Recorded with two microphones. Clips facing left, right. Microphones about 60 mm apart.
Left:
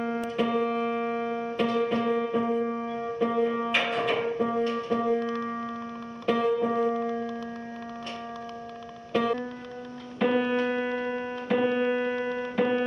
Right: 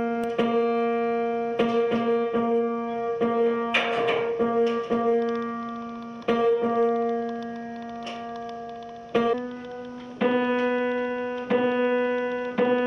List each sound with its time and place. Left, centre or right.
0.0 s music: centre
5.2 s music: right
6.2 s music: centre
9.1 s music: centre